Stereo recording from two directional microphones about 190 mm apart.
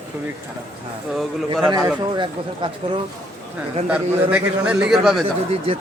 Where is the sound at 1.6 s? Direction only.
20° right (ahead or behind).